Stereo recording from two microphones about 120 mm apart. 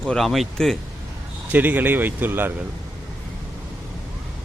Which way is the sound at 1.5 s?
15° right (ahead or behind).